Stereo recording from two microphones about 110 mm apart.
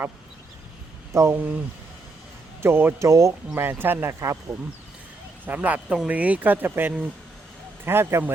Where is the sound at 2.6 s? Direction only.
20° right (ahead or behind).